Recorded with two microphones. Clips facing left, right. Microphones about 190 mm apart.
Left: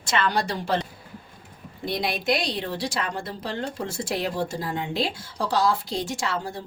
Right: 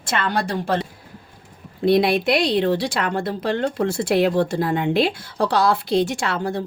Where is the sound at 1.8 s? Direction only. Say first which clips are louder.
Right 11 dB; 65° right (ahead or behind).